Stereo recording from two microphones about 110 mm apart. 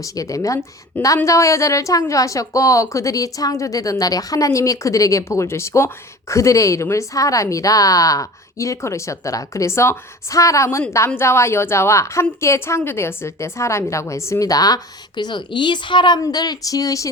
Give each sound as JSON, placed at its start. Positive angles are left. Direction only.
{"t": 0.0, "sound": "a woman's voice", "side_deg": 30}